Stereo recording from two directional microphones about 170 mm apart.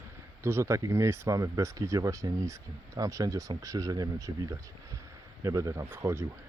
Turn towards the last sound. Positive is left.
turn(degrees=-15)  # may be behind; listen again after turning